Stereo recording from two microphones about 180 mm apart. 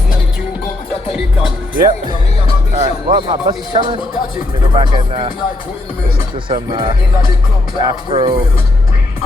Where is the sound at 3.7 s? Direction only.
25° right (ahead or behind).